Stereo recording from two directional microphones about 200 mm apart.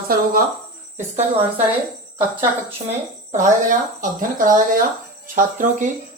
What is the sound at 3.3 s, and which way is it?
Speech, 35° right (ahead or behind).